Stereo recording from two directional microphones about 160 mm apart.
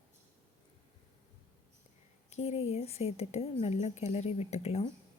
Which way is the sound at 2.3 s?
40° left (ahead or behind).